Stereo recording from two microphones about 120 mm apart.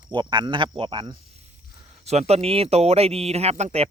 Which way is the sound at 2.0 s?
65° right (ahead or behind).